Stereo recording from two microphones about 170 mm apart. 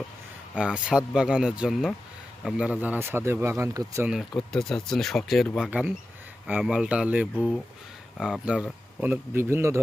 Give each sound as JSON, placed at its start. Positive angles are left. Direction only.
{"t": 0.5, "sound": "speech", "side_deg": -5}
{"t": 4.1, "sound": "speech", "side_deg": 0}